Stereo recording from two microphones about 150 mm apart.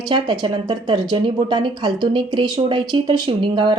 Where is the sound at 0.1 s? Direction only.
30° right (ahead or behind).